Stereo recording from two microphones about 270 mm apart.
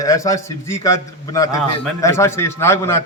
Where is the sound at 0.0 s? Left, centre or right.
Centre.